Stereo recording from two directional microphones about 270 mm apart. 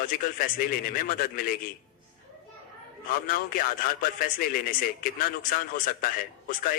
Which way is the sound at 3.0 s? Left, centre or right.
Left.